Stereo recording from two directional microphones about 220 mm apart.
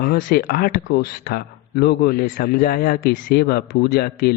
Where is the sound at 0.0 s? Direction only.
40° left (ahead or behind).